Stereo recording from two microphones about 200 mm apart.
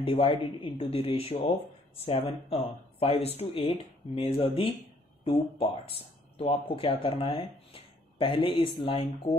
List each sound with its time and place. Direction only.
0.0 s speech: 25° left (ahead or behind)